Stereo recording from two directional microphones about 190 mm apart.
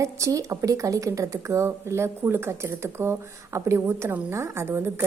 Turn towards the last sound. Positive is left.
turn(degrees=-15)  # may be behind; listen again after turning